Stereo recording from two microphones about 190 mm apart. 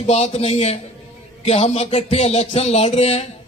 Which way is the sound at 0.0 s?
35° left (ahead or behind).